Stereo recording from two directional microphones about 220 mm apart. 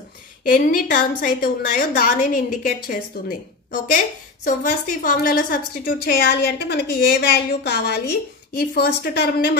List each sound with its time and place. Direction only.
0.5 s a woman's voice: 40° left (ahead or behind)